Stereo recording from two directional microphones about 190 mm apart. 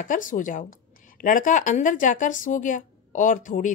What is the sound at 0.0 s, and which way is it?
A woman's voice, 45° left (ahead or behind).